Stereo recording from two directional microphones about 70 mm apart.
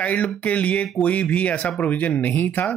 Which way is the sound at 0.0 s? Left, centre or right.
Centre.